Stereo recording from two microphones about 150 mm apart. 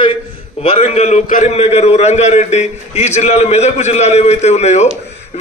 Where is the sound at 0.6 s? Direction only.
45° left (ahead or behind).